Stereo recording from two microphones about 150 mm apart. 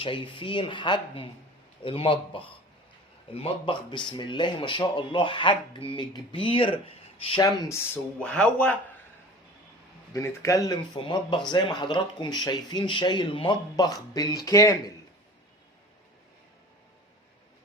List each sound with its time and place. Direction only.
0.0 s speech: 35° left (ahead or behind)
8.2 s speech: 5° left (ahead or behind)
10.1 s speech: 20° left (ahead or behind)